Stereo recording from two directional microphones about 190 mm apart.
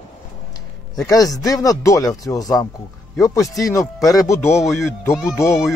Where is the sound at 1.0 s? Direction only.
20° left (ahead or behind).